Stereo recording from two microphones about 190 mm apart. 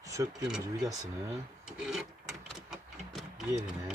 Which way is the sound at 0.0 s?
15° right (ahead or behind).